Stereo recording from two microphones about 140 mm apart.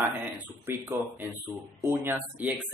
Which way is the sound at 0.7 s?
15° right (ahead or behind).